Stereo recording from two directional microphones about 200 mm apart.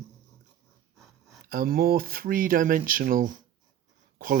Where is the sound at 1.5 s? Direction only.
45° right (ahead or behind).